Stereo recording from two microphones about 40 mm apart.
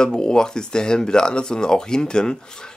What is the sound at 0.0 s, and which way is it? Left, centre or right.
A man's voice, centre.